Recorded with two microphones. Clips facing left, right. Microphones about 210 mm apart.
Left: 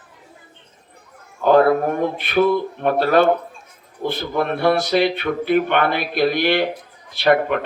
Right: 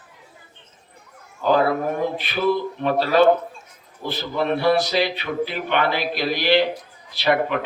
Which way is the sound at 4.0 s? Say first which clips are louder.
Left 5 dB; 50° left (ahead or behind).